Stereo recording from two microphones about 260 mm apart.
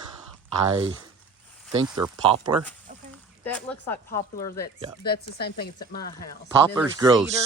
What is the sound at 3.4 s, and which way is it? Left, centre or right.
Speech, centre.